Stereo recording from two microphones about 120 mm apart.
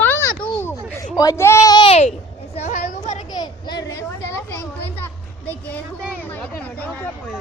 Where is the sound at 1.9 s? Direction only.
65° left (ahead or behind).